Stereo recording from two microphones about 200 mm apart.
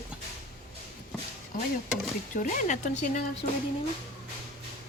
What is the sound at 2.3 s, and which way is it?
Speech, 40° left (ahead or behind).